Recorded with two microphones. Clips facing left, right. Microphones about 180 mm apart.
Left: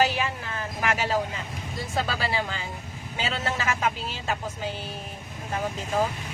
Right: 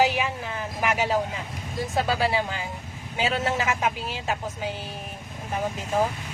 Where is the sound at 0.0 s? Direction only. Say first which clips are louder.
Right 2 dB; 15° right (ahead or behind).